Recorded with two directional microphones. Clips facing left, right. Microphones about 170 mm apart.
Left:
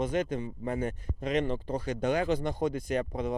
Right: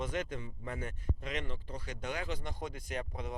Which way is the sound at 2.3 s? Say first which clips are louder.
Left 11 dB; 65° left (ahead or behind).